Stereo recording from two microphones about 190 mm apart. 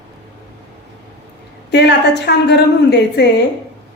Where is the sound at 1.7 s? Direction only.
65° left (ahead or behind).